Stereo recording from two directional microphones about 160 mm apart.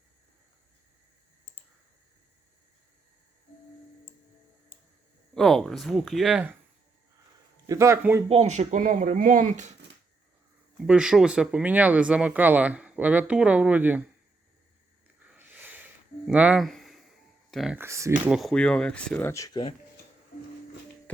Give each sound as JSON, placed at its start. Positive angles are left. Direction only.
{"t": 5.3, "sound": "speech", "side_deg": 5}
{"t": 7.7, "sound": "speech", "side_deg": -15}
{"t": 8.3, "sound": "speech", "side_deg": -45}
{"t": 10.8, "sound": "speech", "side_deg": -5}
{"t": 15.3, "sound": "a sound", "side_deg": -10}
{"t": 17.5, "sound": "speech", "side_deg": 0}
{"t": 17.7, "sound": "speech", "side_deg": -20}
{"t": 18.3, "sound": "speech", "side_deg": 0}